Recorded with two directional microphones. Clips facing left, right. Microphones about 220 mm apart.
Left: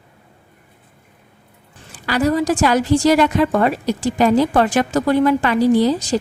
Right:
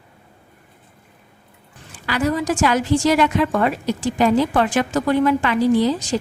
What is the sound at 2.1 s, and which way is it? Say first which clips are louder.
A woman's voice: left 3 dB; 35° left (ahead or behind).